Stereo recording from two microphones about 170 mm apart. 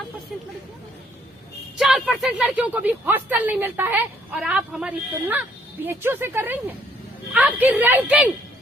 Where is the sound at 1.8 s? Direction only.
5° right (ahead or behind).